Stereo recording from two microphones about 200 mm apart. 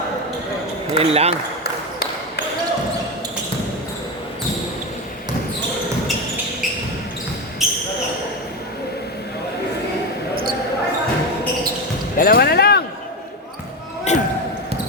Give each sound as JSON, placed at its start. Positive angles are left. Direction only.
{"t": 0.9, "sound": "speech", "side_deg": -30}
{"t": 7.6, "sound": "basketball bounce", "side_deg": 0}
{"t": 12.1, "sound": "basketball bounce", "side_deg": 50}
{"t": 14.1, "sound": "basketball bounce", "side_deg": 35}